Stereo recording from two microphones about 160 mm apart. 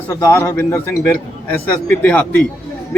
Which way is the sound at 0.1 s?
20° left (ahead or behind).